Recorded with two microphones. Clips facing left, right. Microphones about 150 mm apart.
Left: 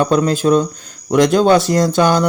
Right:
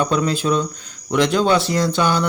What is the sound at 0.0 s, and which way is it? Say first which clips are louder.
Speech: left 5 dB; 45° left (ahead or behind).